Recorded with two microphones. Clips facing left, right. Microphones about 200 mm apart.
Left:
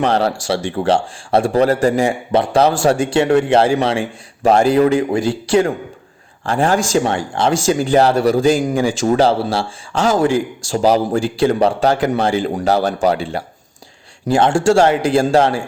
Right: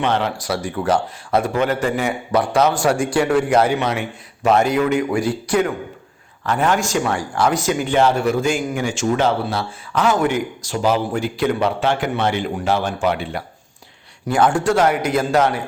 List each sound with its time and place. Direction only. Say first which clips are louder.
0.0 s a man's voice: left 4 dB; 35° left (ahead or behind)